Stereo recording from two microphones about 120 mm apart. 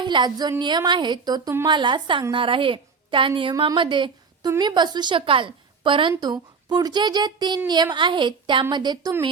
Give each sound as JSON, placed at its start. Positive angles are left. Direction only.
{"t": 0.0, "sound": "a woman's voice", "side_deg": -40}